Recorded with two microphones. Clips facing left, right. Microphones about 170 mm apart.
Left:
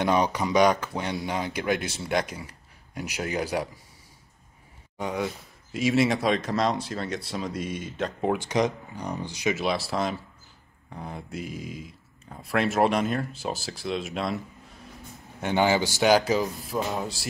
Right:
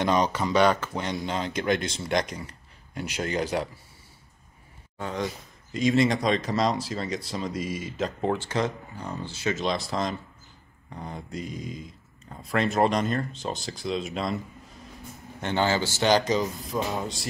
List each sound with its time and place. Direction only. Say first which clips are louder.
0.0 s speech: even; 10° left (ahead or behind)
4.9 s speech: left 2 dB; 15° left (ahead or behind)
5.2 s speech: left 1 dB; 5° left (ahead or behind)
8.3 s speech: left 4 dB; 15° left (ahead or behind)
15.4 s speech: left 2 dB; 15° left (ahead or behind)